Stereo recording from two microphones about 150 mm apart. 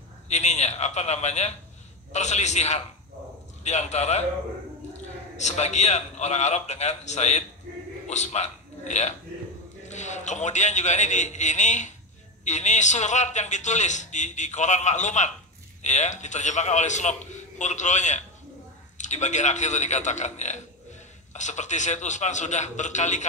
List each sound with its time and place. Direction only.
0.3 s a man's voice: 50° left (ahead or behind)
5.4 s a man's voice: 50° left (ahead or behind)